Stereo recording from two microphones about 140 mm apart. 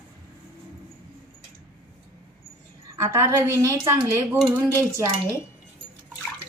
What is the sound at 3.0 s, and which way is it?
Speech, 20° right (ahead or behind).